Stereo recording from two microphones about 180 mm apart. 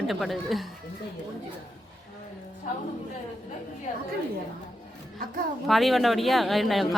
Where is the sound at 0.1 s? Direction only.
Centre (ahead or behind).